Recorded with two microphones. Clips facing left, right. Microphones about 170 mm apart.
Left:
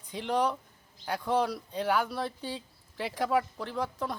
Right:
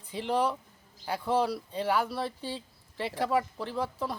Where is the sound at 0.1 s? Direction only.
Centre (ahead or behind).